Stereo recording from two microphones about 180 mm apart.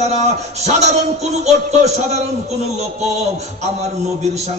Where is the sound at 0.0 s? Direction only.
40° right (ahead or behind).